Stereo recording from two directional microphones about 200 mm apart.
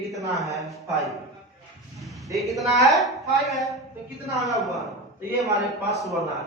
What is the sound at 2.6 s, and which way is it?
Speech, centre (ahead or behind).